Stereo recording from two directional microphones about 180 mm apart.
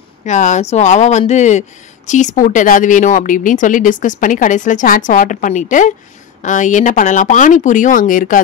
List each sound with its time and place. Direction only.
0.2 s speech: 40° left (ahead or behind)